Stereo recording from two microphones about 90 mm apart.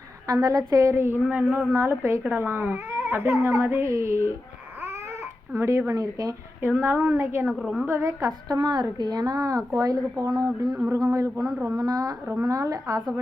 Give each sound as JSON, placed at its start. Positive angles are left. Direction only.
{"t": 0.3, "sound": "a woman's voice", "side_deg": -45}
{"t": 5.5, "sound": "a woman's voice", "side_deg": -35}
{"t": 6.6, "sound": "speech", "side_deg": -25}
{"t": 7.6, "sound": "a woman's voice", "side_deg": -5}
{"t": 7.9, "sound": "a woman's voice", "side_deg": -35}